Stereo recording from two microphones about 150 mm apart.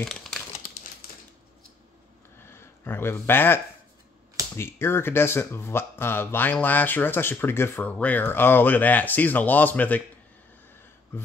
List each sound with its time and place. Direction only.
0.0 s crumpling: centre (ahead or behind)
0.6 s typewriter: 75° left (ahead or behind)
2.4 s speech: 15° left (ahead or behind)